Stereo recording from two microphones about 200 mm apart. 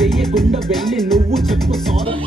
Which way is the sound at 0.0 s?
Centre (ahead or behind).